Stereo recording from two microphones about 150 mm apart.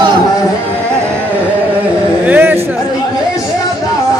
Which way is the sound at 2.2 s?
10° right (ahead or behind).